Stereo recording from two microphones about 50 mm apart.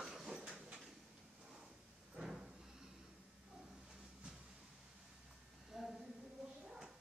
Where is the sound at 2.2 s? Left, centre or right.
Centre.